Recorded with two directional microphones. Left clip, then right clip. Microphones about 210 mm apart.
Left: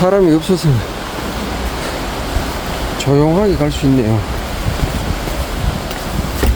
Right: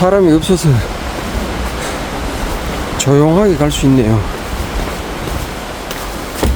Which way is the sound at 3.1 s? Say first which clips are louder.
Right 2 dB; 15° right (ahead or behind).